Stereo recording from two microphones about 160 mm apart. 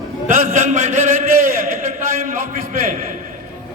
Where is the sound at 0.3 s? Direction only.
55° right (ahead or behind).